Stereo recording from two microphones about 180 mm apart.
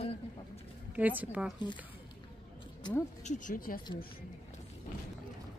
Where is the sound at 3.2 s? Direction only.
45° left (ahead or behind).